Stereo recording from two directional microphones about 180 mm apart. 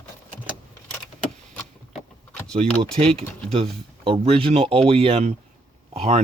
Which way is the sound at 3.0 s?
30° right (ahead or behind).